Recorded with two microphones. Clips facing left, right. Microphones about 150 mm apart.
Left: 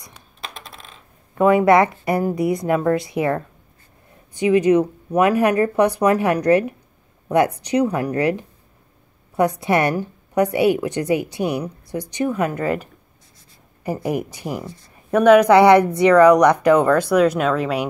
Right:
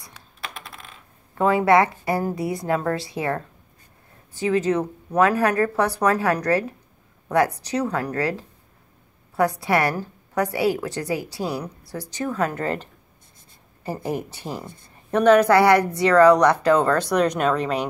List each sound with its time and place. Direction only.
1.4 s a woman's voice: 20° left (ahead or behind)